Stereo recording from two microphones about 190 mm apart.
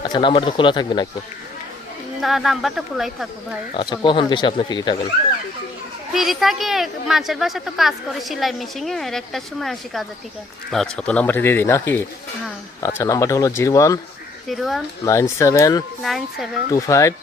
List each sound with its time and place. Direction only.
0.0 s speech: 25° left (ahead or behind)
2.2 s a woman's voice: centre (ahead or behind)
3.8 s speech: 25° left (ahead or behind)
6.1 s a woman's voice: centre (ahead or behind); by 14.0 s 15° left (ahead or behind)
14.4 s a woman's voice: centre (ahead or behind)
15.0 s speech: 15° left (ahead or behind)
16.0 s a woman's voice: centre (ahead or behind)
16.8 s speech: 15° left (ahead or behind)